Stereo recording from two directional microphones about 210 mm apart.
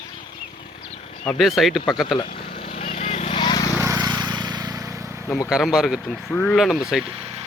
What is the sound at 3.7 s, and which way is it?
Vehicle, 15° right (ahead or behind).